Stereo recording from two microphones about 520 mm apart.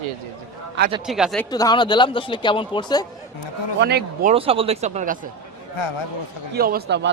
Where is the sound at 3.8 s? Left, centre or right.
Centre.